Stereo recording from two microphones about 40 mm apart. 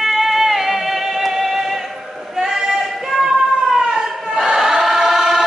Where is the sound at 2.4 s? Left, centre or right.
Centre.